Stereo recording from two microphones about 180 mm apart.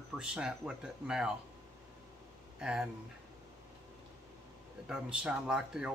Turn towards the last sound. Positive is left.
turn(degrees=-5)  # may be behind; listen again after turning